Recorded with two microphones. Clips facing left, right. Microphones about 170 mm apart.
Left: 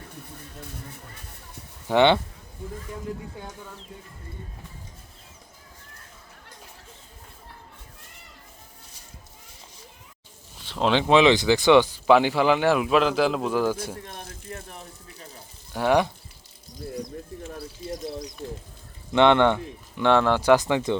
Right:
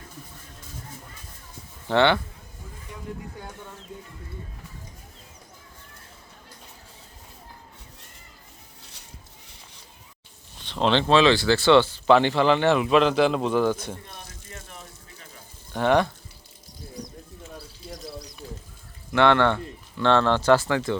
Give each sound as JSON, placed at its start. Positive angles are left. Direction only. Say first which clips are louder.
{"t": 1.9, "sound": "speech", "louder": "left 2 dB", "side_deg": 20}
{"t": 10.6, "sound": "speech", "louder": "even", "side_deg": 5}
{"t": 15.7, "sound": "speech", "louder": "even", "side_deg": 10}
{"t": 19.1, "sound": "speech", "louder": "left 2 dB", "side_deg": 20}